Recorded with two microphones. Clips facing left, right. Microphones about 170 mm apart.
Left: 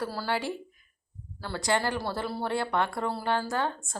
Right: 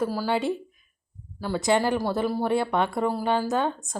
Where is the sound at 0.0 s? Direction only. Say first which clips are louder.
Right 6 dB; 15° right (ahead or behind).